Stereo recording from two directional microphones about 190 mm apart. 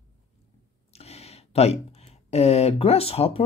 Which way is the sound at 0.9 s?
35° left (ahead or behind).